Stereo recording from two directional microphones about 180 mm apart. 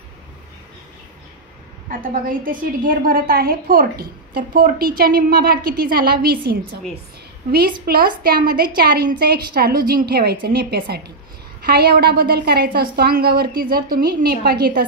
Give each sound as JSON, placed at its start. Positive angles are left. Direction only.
{"t": 1.9, "sound": "a woman's voice", "side_deg": -50}
{"t": 7.8, "sound": "a woman's voice", "side_deg": -55}